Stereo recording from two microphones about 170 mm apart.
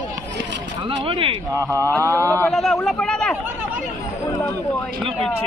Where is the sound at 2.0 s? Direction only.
20° right (ahead or behind).